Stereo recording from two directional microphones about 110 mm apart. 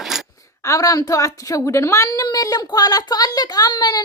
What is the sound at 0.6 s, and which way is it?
A woman's voice, 30° left (ahead or behind).